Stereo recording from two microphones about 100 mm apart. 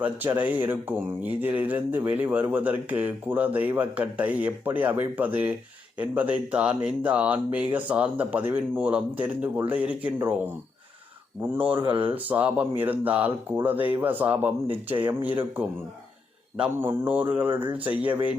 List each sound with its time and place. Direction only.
0.0 s speech: 15° right (ahead or behind)
16.7 s speech: 25° right (ahead or behind)